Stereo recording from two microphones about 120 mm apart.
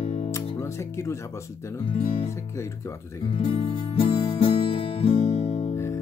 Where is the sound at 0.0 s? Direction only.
55° left (ahead or behind).